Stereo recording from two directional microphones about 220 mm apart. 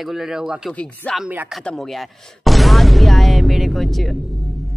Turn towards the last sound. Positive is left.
turn(degrees=0)  # may be behind; listen again after turning